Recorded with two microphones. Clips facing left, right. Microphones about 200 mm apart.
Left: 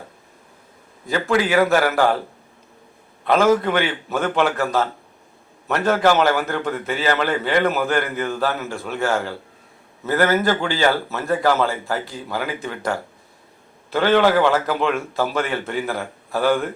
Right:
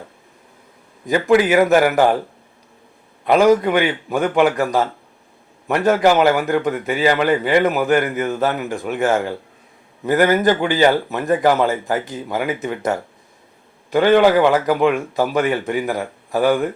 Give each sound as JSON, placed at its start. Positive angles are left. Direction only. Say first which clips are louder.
{"t": 1.0, "sound": "a man's voice", "louder": "right 5 dB", "side_deg": -15}
{"t": 3.2, "sound": "a man's voice", "louder": "right 3 dB", "side_deg": -15}